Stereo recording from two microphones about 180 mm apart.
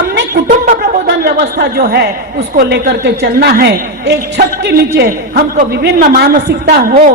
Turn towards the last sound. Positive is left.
turn(degrees=-55)  # may be behind; listen again after turning